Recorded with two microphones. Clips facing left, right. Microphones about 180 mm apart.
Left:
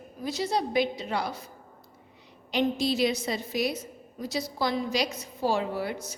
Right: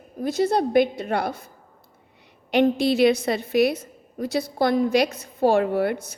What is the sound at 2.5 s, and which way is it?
A woman's voice, 60° right (ahead or behind).